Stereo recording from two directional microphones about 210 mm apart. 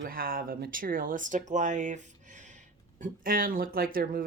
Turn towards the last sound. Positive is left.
turn(degrees=-40)  # may be behind; listen again after turning